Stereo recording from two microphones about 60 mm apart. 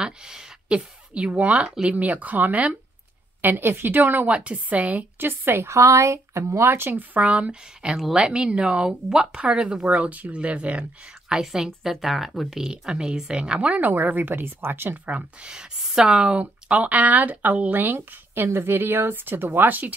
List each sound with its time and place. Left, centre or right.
0.0 s speech: centre
3.4 s a woman's voice: right
7.9 s speech: centre; by 15.0 s right
15.0 s a woman's voice: right